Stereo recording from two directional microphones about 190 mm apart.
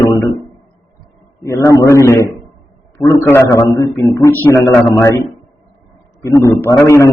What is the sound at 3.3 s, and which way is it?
A man's voice, 15° left (ahead or behind).